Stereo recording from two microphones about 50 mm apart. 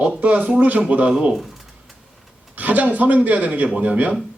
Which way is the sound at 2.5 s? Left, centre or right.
Right.